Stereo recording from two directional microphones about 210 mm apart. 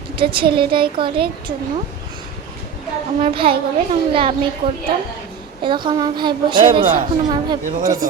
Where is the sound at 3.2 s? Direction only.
25° right (ahead or behind).